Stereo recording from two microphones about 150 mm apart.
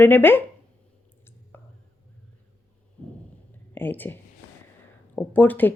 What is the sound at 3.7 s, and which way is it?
A woman's voice, 15° left (ahead or behind).